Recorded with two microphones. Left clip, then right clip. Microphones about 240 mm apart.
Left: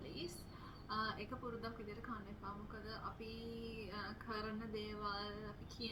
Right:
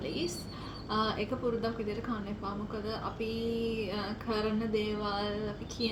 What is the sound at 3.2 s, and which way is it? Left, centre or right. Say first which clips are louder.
Music: right 16 dB; centre.